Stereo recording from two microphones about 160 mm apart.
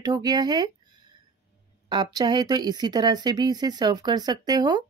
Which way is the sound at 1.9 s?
25° right (ahead or behind).